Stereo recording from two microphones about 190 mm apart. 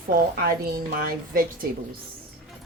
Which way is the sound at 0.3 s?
50° right (ahead or behind).